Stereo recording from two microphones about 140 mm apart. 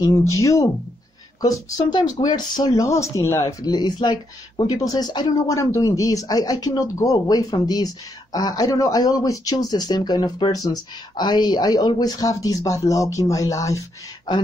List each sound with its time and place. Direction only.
0.0 s speech: 20° left (ahead or behind)
2.2 s speech: 30° left (ahead or behind)